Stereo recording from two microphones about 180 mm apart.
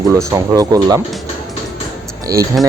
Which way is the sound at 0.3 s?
20° right (ahead or behind).